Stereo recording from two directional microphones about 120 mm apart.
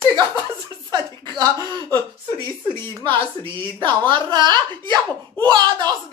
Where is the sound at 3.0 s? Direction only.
45° right (ahead or behind).